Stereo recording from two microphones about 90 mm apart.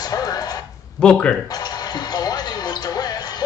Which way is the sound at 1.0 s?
10° left (ahead or behind).